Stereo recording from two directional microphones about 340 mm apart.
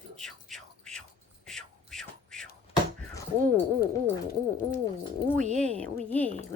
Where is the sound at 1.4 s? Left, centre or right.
Centre.